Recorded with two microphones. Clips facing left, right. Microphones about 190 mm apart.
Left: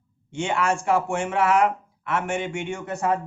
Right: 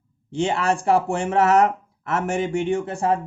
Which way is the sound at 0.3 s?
35° right (ahead or behind).